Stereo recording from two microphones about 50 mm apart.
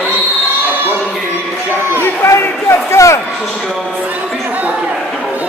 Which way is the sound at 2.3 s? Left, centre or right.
Left.